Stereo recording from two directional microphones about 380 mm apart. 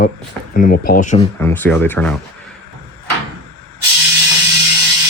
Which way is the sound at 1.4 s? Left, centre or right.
Centre.